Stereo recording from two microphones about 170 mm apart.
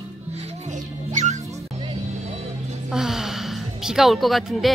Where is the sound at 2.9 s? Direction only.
Centre (ahead or behind).